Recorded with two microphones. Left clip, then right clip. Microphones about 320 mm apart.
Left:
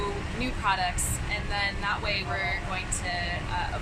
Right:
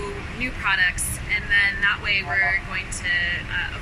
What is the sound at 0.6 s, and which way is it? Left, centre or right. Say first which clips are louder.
Speech: right 6 dB; centre.